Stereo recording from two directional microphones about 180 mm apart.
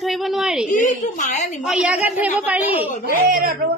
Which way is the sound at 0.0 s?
Centre (ahead or behind).